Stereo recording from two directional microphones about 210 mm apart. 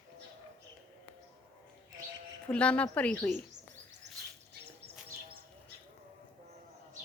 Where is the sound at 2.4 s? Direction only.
5° left (ahead or behind).